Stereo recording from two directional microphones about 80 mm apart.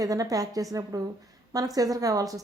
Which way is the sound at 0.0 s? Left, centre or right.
Right.